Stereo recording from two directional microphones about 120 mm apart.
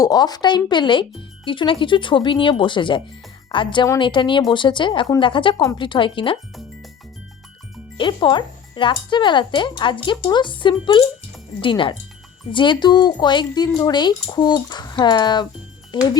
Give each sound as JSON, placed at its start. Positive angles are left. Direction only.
{"t": 0.0, "sound": "speech", "side_deg": 35}
{"t": 7.9, "sound": "speech", "side_deg": 45}